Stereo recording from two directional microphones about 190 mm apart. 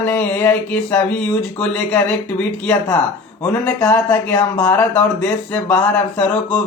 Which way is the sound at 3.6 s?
10° left (ahead or behind).